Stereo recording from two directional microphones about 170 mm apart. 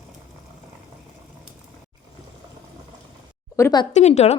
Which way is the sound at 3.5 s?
15° left (ahead or behind).